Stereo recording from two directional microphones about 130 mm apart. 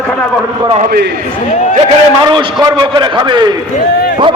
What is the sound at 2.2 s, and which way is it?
A man's voice, 35° right (ahead or behind).